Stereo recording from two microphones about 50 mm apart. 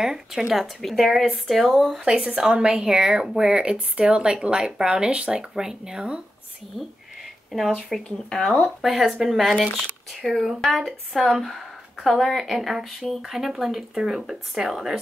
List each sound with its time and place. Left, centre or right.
0.0 s a woman's voice: centre
2.0 s a woman's voice: centre
7.5 s a woman's voice: centre
8.8 s a woman's voice: centre